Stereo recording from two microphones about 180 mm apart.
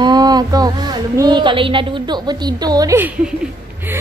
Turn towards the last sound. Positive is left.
turn(degrees=-15)  # may be behind; listen again after turning